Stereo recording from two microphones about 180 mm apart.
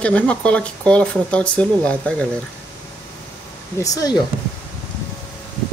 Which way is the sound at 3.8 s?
20° left (ahead or behind).